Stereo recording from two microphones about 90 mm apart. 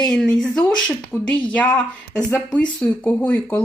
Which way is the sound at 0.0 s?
10° left (ahead or behind).